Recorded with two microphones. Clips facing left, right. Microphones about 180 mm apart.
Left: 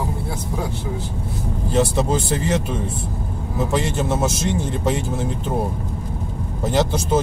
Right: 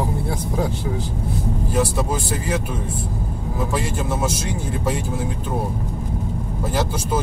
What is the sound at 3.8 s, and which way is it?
Speech, 25° left (ahead or behind).